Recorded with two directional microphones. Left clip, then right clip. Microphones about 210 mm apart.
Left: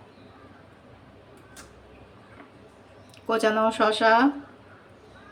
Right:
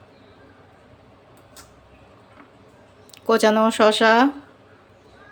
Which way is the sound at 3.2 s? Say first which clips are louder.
Right 5 dB; 50° right (ahead or behind).